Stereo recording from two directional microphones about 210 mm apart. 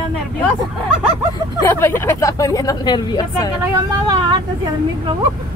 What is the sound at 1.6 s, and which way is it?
Speech, 10° left (ahead or behind).